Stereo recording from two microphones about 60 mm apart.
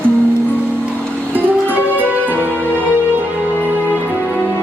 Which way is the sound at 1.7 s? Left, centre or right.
Right.